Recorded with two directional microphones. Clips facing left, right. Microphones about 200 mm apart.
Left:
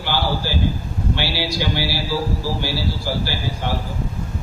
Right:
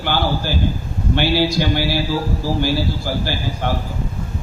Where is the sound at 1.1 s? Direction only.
50° right (ahead or behind).